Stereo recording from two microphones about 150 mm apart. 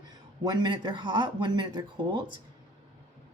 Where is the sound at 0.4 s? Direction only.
30° right (ahead or behind).